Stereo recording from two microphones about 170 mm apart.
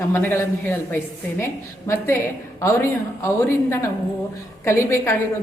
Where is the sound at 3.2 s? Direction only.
15° left (ahead or behind).